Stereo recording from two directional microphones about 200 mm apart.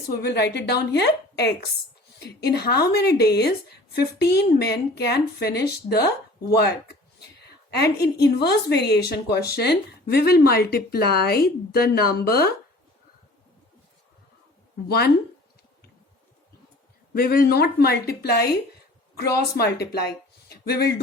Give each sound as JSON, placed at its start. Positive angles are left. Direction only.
{"t": 0.1, "sound": "a woman's voice", "side_deg": 55}
{"t": 14.8, "sound": "speech", "side_deg": 50}
{"t": 17.2, "sound": "speech", "side_deg": 50}